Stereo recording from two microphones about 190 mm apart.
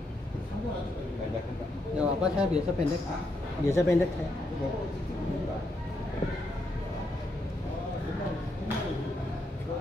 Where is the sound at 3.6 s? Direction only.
15° left (ahead or behind).